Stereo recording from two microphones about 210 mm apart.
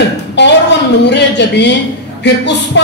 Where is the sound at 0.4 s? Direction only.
55° left (ahead or behind).